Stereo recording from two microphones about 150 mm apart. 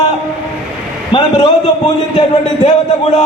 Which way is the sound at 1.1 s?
35° left (ahead or behind).